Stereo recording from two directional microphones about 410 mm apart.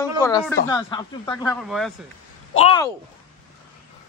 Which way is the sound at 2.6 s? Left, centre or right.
Centre.